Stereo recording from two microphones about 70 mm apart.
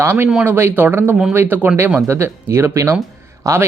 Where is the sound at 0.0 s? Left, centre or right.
Right.